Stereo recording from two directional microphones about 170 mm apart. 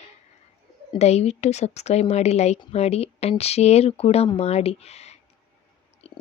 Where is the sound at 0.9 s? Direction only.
40° left (ahead or behind).